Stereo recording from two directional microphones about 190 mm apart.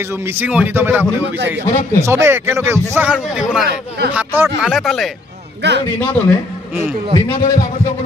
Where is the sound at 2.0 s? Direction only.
15° right (ahead or behind).